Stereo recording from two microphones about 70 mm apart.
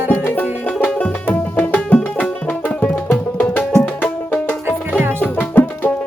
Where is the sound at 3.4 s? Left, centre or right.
Left.